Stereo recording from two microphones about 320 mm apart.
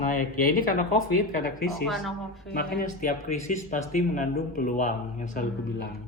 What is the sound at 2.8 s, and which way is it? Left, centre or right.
Speech, left.